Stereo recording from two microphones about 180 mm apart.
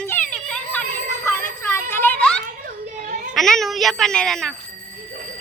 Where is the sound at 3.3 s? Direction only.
Centre (ahead or behind).